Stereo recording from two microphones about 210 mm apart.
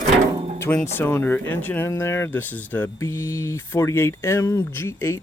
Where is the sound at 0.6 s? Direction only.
10° left (ahead or behind).